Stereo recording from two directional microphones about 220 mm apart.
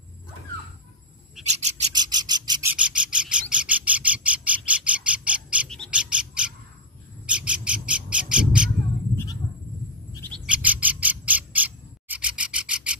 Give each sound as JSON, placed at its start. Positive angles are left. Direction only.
{"t": 1.4, "sound": "a sound", "side_deg": -30}
{"t": 2.0, "sound": "a sound", "side_deg": -20}
{"t": 2.7, "sound": "bird", "side_deg": -5}
{"t": 7.2, "sound": "squawk", "side_deg": -5}
{"t": 10.1, "sound": "bird", "side_deg": 10}
{"t": 10.4, "sound": "bird", "side_deg": -5}